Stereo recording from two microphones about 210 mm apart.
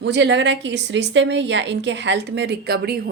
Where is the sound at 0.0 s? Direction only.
55° right (ahead or behind).